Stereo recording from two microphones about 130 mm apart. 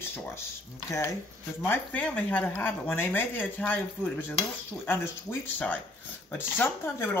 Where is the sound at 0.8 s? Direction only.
20° left (ahead or behind).